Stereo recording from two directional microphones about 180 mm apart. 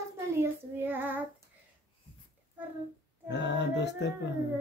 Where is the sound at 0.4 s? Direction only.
10° right (ahead or behind).